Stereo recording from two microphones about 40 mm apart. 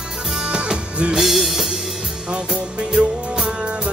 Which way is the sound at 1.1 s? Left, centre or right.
Centre.